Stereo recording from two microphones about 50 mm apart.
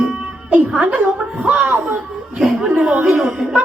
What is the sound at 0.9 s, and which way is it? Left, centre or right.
Speech, right.